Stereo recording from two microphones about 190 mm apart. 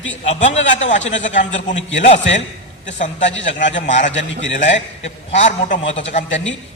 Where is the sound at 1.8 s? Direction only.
80° left.